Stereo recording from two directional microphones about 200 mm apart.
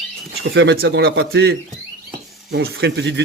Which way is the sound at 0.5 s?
60° right (ahead or behind).